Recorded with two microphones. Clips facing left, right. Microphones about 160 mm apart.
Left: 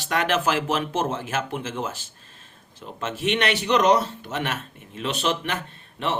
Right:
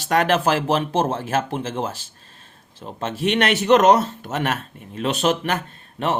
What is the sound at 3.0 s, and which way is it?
A man's voice, 35° right (ahead or behind).